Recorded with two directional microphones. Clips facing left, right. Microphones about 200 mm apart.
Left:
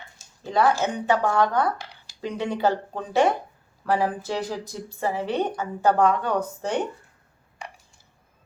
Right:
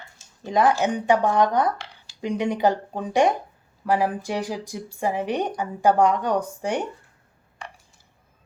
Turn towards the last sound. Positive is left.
turn(degrees=-10)  # may be behind; listen again after turning